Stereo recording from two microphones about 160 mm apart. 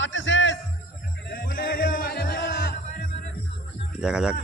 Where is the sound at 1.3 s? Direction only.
65° left (ahead or behind).